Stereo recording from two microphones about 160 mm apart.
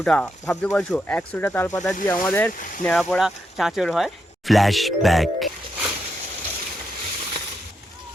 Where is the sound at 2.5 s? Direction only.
55° left (ahead or behind).